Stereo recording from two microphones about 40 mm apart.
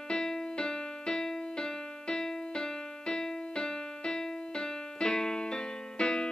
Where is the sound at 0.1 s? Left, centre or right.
Centre.